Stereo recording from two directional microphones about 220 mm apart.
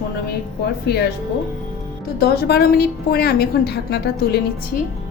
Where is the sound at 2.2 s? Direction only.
50° left (ahead or behind).